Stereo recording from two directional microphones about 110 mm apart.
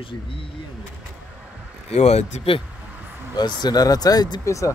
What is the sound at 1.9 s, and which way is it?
Speech, 80° left.